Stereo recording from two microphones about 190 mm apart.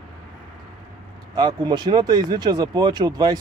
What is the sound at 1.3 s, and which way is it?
Speech, 20° right (ahead or behind).